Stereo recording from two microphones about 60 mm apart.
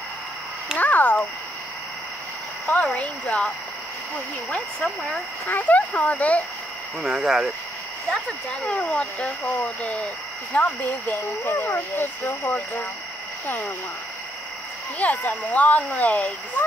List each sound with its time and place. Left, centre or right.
0.7 s a sound: left
2.6 s speech: left
5.5 s speech: left
7.0 s speech: centre
8.5 s speech: centre
10.5 s speech: left
11.1 s speech: left
15.0 s speech: left